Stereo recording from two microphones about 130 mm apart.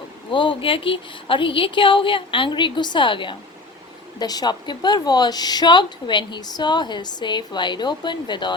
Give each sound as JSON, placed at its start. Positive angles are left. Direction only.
{"t": 0.3, "sound": "a woman's voice", "side_deg": 40}